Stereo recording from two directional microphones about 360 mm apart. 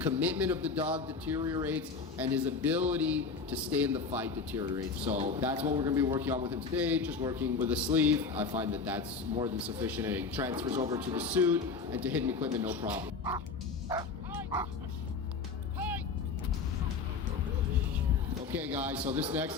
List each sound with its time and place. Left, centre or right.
0.0 s speech: centre
13.8 s bow-wow: centre
18.5 s speech: centre